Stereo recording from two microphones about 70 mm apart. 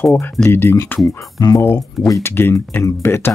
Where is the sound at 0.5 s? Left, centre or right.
Left.